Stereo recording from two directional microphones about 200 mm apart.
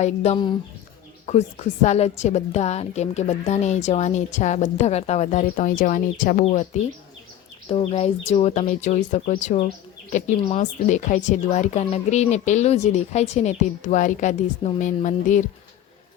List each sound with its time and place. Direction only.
0.0 s speech: 30° left (ahead or behind)
7.7 s speech: 30° left (ahead or behind)